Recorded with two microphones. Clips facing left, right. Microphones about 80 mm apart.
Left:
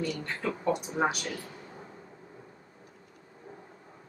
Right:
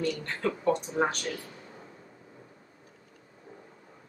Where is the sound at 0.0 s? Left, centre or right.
Centre.